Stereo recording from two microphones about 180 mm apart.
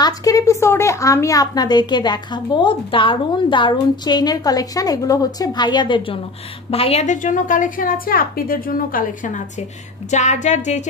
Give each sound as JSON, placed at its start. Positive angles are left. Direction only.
{"t": 0.0, "sound": "a woman's voice", "side_deg": 20}
{"t": 10.1, "sound": "music", "side_deg": 40}